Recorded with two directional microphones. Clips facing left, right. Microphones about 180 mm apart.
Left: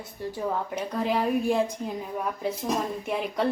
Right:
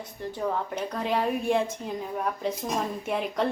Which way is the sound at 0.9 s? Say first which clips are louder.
Left 2 dB; centre (ahead or behind).